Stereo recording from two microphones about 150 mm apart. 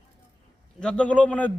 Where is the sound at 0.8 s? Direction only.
5° left (ahead or behind).